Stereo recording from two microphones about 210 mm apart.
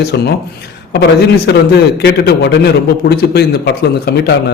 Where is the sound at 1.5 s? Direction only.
50° left (ahead or behind).